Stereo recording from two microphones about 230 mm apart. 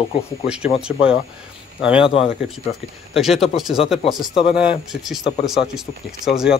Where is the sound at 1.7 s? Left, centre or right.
Centre.